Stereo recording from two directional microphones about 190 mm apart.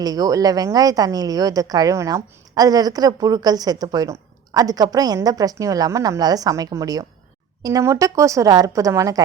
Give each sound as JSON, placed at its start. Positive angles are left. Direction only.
{"t": 0.0, "sound": "a woman's voice", "side_deg": -20}